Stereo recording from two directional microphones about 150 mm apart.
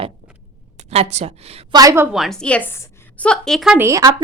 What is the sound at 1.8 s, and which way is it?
Speech, 20° right (ahead or behind).